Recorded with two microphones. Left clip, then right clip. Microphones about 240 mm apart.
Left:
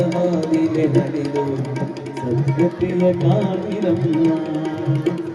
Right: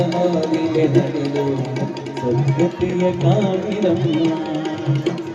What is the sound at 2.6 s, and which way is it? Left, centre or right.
Speech, left.